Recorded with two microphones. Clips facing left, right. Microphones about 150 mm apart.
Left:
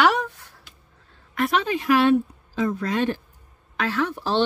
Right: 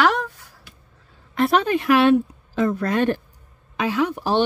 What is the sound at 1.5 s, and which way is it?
A woman's voice, 50° right (ahead or behind).